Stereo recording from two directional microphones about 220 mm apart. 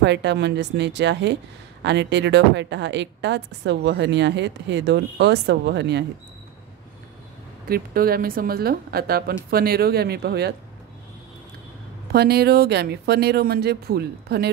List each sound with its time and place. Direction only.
0.0 s speech: 50° right (ahead or behind)
7.6 s speech: 40° right (ahead or behind)
12.1 s speech: 45° right (ahead or behind)